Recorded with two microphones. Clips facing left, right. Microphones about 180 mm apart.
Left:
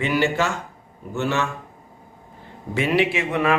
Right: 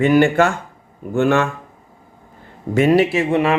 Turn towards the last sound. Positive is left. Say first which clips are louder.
# right 4 dB
turn(degrees=-30)  # may be behind; listen again after turning